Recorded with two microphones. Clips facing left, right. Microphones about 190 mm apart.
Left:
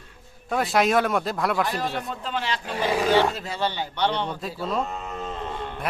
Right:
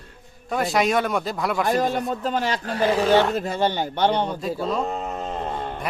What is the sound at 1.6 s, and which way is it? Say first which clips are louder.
Speech: right 6 dB; 45° right (ahead or behind).